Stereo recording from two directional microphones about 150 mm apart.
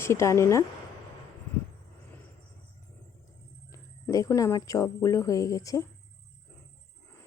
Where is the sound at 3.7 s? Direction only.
20° left (ahead or behind).